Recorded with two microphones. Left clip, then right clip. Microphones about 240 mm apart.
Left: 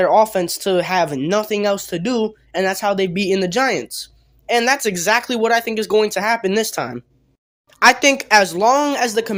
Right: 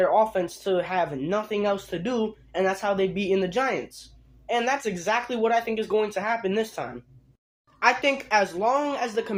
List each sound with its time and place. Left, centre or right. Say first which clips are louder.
0.0 s speech: left 7 dB; left